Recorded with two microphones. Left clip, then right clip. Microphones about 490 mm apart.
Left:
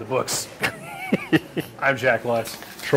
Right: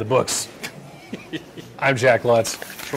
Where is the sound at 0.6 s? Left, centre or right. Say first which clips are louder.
Left 9 dB; left.